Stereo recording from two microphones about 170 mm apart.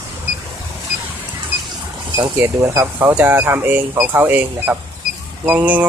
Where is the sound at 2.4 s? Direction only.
15° right (ahead or behind).